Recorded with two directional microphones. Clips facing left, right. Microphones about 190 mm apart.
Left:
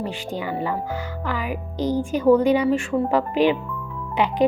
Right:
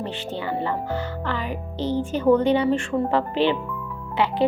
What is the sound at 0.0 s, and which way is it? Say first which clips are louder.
Speech: left 1 dB; 10° left (ahead or behind).